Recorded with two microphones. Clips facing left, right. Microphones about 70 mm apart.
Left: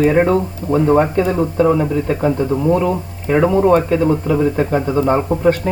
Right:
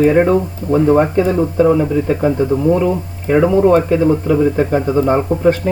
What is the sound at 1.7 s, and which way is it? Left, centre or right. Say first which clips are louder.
Speech: right 2 dB; centre.